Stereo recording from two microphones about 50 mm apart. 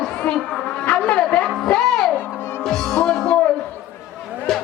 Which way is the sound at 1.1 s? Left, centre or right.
Left.